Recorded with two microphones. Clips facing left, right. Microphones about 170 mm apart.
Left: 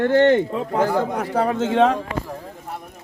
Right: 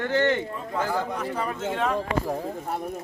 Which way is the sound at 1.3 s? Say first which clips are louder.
Left 9 dB; 85° left.